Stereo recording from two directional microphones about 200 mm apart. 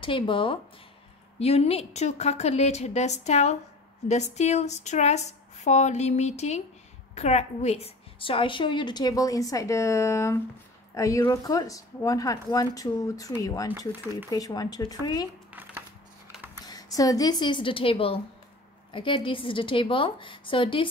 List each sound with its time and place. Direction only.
0.0 s a woman's voice: 25° left (ahead or behind)
16.6 s a woman's voice: 20° left (ahead or behind)